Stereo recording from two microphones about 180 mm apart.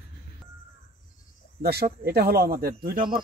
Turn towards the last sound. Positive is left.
turn(degrees=-55)  # may be behind; listen again after turning